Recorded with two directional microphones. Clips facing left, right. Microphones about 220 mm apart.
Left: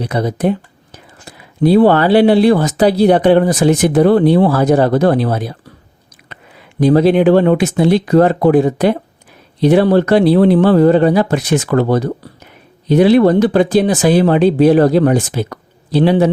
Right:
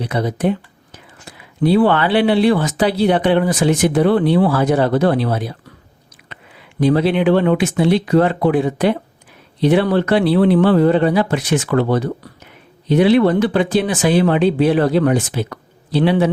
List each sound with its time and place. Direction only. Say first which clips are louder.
0.0 s speech: left 3 dB; 40° left (ahead or behind)